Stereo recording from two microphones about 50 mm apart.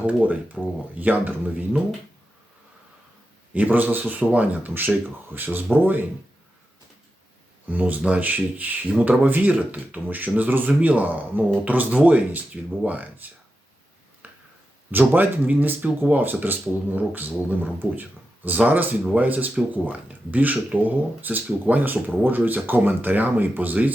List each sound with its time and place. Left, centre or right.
0.0 s speech: right
1.5 s speech: right
3.5 s speech: right
7.7 s speech: right
14.2 s a sound: right
14.8 s speech: right